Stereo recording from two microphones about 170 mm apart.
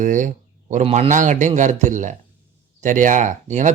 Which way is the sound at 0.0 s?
50° right (ahead or behind).